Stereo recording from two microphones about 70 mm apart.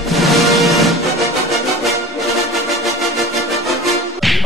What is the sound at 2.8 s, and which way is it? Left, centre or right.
Music, centre.